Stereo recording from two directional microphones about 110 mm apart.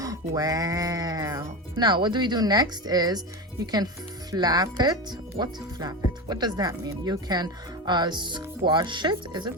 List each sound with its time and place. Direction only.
0.0 s speech: 30° right (ahead or behind)
4.3 s speech: 35° right (ahead or behind)